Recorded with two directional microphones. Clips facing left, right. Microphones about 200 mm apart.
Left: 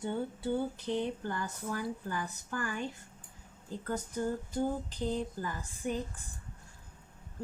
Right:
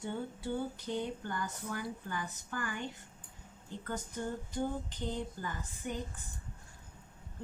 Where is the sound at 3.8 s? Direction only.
40° left (ahead or behind).